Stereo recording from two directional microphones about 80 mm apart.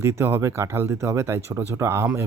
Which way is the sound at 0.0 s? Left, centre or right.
Right.